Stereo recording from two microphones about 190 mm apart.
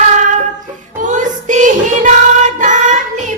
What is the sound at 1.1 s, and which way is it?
Child singing, 40° right (ahead or behind).